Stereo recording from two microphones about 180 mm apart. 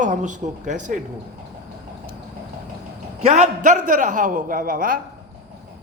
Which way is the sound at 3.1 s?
40° right (ahead or behind).